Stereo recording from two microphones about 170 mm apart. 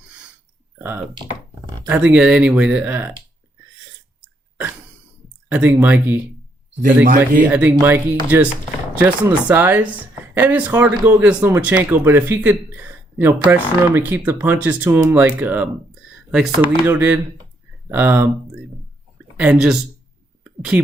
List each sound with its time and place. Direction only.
0.8 s speech: 10° right (ahead or behind)
5.5 s speech: 10° right (ahead or behind)
6.8 s speech: 55° right (ahead or behind)
7.4 s speech: 10° right (ahead or behind)
19.4 s speech: 5° right (ahead or behind)